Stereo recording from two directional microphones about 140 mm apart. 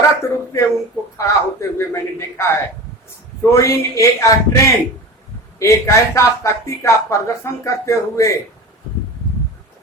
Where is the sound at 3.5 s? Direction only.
20° left (ahead or behind).